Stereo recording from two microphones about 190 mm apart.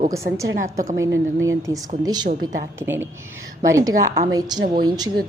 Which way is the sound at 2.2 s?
45° right (ahead or behind).